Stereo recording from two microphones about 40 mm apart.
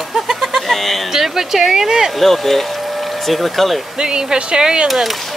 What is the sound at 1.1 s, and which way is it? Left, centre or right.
Speech, centre.